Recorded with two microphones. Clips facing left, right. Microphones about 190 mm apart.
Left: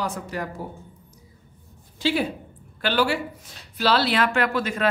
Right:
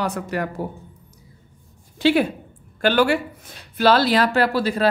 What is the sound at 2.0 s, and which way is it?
Speech, 65° right (ahead or behind).